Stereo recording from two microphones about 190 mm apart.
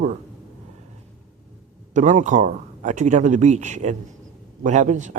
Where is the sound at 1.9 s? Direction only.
40° right (ahead or behind).